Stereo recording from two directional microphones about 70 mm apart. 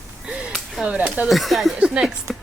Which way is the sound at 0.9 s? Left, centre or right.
Right.